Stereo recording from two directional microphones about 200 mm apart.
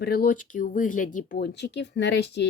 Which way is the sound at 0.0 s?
50° left (ahead or behind).